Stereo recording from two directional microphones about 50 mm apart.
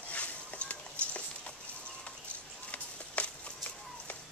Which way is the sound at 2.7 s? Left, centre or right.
Left.